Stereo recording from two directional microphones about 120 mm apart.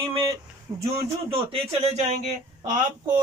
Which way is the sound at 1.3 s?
55° right (ahead or behind).